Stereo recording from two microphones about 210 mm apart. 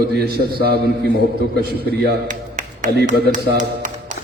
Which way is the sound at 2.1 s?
35° right (ahead or behind).